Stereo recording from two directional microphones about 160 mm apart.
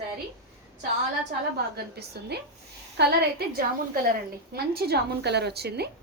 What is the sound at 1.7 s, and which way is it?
A woman's voice, 90° right.